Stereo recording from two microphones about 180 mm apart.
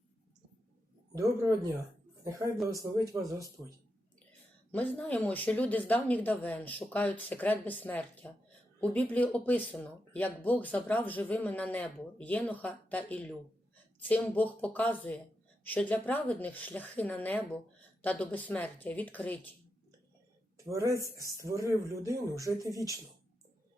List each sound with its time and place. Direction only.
1.1 s speech: 20° right (ahead or behind)
4.3 s speech: 10° left (ahead or behind)
20.7 s speech: 15° right (ahead or behind)